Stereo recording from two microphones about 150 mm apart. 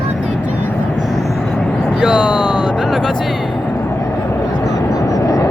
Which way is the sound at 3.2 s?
5° right (ahead or behind).